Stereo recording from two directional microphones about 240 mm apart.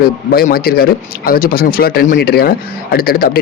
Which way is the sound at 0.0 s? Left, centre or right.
Left.